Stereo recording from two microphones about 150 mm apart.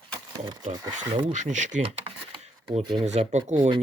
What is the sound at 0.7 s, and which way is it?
Speech, 30° right (ahead or behind).